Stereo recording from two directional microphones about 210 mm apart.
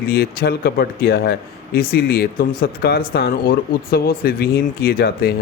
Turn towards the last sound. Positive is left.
turn(degrees=50)  # may be behind; listen again after turning